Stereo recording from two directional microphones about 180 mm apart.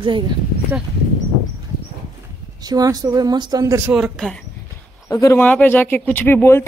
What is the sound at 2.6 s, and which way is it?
Speech, 20° right (ahead or behind).